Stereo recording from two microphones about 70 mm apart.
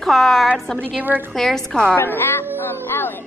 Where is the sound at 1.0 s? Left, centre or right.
Right.